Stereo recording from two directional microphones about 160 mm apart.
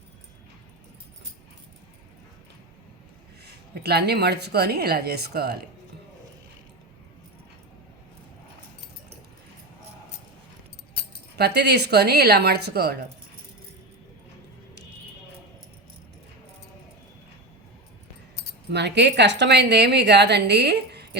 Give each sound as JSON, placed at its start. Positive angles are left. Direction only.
{"t": 3.4, "sound": "speech", "side_deg": -90}
{"t": 11.3, "sound": "a woman's voice", "side_deg": -90}
{"t": 18.7, "sound": "a woman's voice", "side_deg": -90}